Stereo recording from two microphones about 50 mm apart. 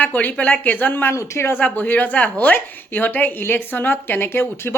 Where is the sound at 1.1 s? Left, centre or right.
Left.